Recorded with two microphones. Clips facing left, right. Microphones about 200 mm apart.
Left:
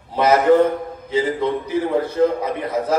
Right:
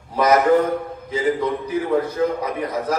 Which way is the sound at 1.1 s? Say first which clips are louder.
Left 1 dB; 30° left (ahead or behind).